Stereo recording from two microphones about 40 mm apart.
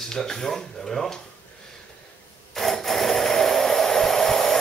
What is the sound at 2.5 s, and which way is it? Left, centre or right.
Hair dryer, centre.